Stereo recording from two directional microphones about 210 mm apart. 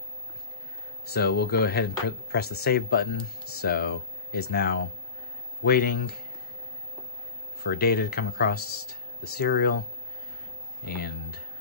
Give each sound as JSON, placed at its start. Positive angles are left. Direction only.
{"t": 1.0, "sound": "speech", "side_deg": 50}
{"t": 7.6, "sound": "speech", "side_deg": 50}
{"t": 10.9, "sound": "speech", "side_deg": 45}